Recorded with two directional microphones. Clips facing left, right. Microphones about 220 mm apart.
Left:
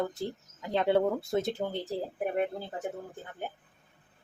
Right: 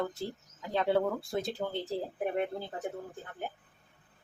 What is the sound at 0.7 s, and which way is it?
A woman's voice, 25° left (ahead or behind).